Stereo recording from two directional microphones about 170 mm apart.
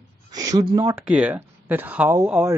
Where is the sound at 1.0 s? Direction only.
10° right (ahead or behind).